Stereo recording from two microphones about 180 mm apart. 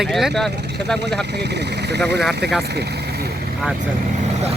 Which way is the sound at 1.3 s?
70° right (ahead or behind).